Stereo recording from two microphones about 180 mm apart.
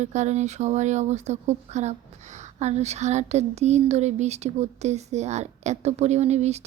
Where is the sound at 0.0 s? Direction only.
40° right (ahead or behind).